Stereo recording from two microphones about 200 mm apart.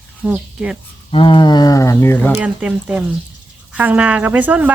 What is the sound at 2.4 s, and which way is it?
Speech, 5° right (ahead or behind).